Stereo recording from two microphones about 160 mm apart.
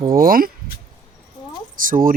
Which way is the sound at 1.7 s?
60° right (ahead or behind).